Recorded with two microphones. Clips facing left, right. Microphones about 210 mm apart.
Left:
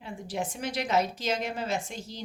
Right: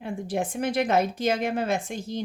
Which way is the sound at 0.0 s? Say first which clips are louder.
Right 6 dB; 55° right (ahead or behind).